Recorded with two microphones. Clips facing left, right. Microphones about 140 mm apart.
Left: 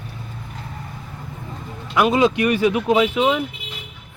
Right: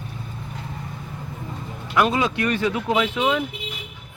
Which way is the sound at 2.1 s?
20° left (ahead or behind).